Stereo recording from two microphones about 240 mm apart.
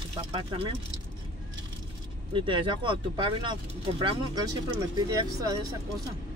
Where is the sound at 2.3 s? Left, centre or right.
Centre.